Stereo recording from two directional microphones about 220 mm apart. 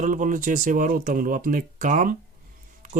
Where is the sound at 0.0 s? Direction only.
35° right (ahead or behind).